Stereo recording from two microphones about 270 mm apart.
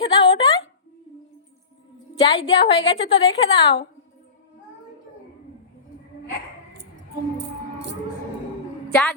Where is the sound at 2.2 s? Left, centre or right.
Centre.